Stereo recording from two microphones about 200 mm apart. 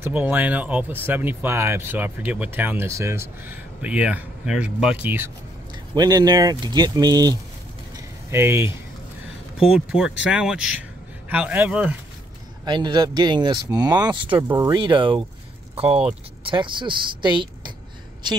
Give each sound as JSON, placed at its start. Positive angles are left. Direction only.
{"t": 0.0, "sound": "speech", "side_deg": -10}
{"t": 7.9, "sound": "a sound", "side_deg": -15}
{"t": 9.6, "sound": "speech", "side_deg": 0}
{"t": 12.6, "sound": "speech", "side_deg": -20}